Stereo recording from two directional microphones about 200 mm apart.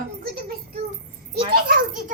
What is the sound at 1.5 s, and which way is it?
Speech, 50° right (ahead or behind).